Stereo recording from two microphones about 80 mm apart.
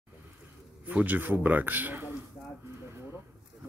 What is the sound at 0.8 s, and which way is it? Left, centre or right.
A man's voice, right.